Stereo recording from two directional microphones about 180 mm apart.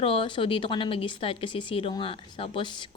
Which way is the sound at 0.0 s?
30° left (ahead or behind).